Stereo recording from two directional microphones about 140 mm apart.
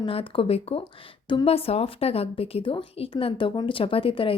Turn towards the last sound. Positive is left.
turn(degrees=40)  # may be behind; listen again after turning